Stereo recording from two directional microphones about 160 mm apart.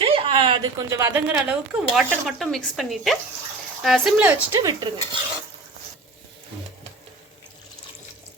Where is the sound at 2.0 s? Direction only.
Centre (ahead or behind).